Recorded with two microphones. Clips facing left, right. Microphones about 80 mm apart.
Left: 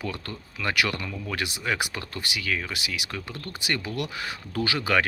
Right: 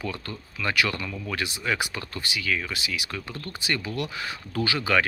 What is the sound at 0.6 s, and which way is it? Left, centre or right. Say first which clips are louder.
Speech: right 1 dB; left.